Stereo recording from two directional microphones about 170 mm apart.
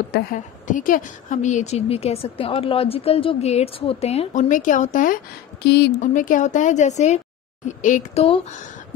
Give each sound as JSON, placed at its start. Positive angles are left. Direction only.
{"t": 0.1, "sound": "a woman's voice", "side_deg": 50}
{"t": 5.9, "sound": "a woman's voice", "side_deg": 50}